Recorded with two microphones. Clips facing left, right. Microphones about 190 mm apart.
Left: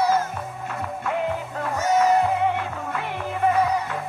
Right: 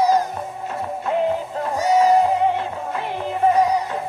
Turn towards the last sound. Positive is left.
turn(degrees=-30)  # may be behind; listen again after turning